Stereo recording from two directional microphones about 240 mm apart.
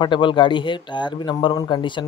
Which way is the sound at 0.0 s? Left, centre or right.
Centre.